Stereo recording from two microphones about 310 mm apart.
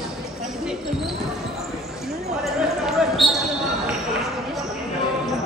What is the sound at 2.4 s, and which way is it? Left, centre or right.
Basketball bounce, centre.